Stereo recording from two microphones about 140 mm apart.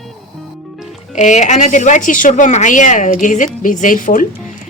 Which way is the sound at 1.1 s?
60° left (ahead or behind).